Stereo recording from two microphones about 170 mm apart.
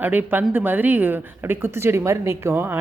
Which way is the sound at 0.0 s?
10° right (ahead or behind).